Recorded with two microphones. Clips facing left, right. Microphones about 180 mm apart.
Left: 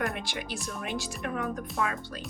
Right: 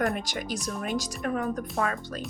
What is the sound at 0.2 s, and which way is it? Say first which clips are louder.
Speech: right 3 dB; 40° right (ahead or behind).